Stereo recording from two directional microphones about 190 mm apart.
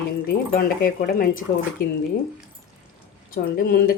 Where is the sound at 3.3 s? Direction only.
50° left (ahead or behind).